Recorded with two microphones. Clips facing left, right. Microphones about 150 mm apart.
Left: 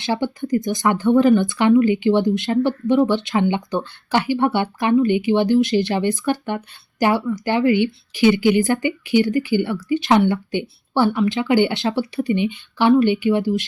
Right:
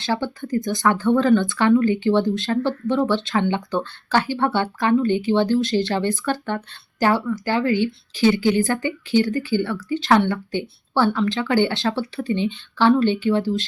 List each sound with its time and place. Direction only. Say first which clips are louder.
0.0 s a woman's voice: left 2 dB; 20° left (ahead or behind)